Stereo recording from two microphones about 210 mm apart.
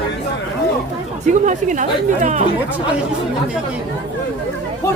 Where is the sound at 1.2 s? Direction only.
35° right (ahead or behind).